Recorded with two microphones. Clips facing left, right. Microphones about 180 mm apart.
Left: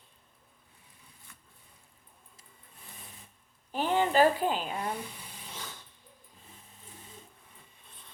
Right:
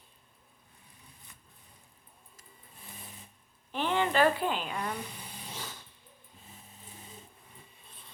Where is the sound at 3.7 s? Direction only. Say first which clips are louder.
Left 2 dB; 40° left (ahead or behind).